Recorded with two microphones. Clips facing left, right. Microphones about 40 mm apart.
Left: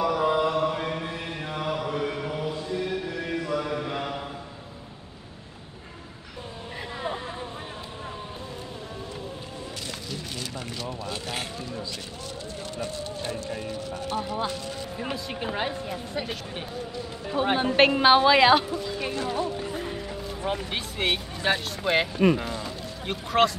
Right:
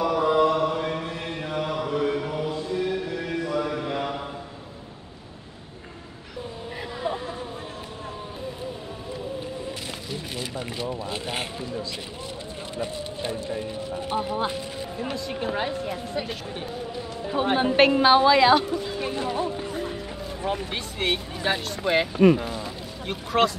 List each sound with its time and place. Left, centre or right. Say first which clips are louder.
0.0 s mantra: right 3 dB; centre
10.8 s speech: right 3 dB; centre
15.1 s a woman's voice: right 4 dB; centre
17.6 s a woman's voice: right 2 dB; centre
18.8 s speech: right 1 dB; centre
19.6 s music: right 1 dB; centre
20.4 s speech: right 1 dB; centre
22.2 s a sound: right 4 dB; centre